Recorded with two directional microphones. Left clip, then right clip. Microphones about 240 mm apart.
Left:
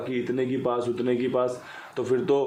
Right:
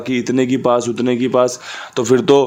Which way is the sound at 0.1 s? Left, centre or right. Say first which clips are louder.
Right 11 dB; right.